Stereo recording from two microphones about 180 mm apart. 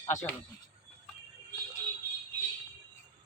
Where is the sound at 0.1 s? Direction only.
15° left (ahead or behind).